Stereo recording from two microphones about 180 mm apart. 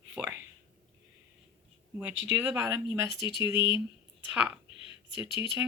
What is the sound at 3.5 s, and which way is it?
Speech, 30° left (ahead or behind).